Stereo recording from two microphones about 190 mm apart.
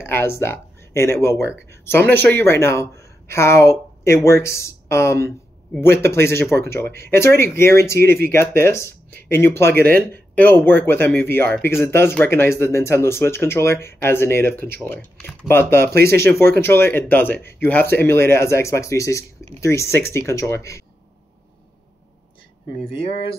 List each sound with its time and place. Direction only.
0.0 s speech: 15° left (ahead or behind)
22.9 s speech: 30° left (ahead or behind)